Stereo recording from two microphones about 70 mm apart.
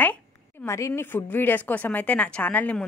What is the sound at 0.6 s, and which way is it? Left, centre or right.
A woman's voice, left.